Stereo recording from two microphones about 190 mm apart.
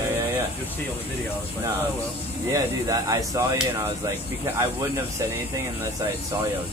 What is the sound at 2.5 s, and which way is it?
Speech, 20° right (ahead or behind).